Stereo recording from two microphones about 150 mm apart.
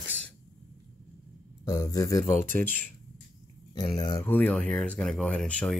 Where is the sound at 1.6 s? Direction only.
25° left (ahead or behind).